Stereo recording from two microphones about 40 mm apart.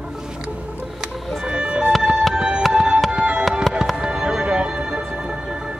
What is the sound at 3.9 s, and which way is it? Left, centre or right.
Fireworks, right.